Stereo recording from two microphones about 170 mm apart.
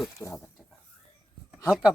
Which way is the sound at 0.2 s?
15° left (ahead or behind).